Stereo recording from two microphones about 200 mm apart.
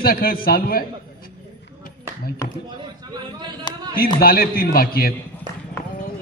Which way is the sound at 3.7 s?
20° left (ahead or behind).